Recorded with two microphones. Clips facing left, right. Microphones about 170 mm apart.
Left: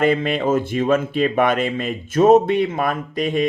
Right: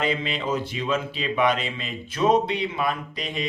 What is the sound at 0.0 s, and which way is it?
Speech, 55° left (ahead or behind).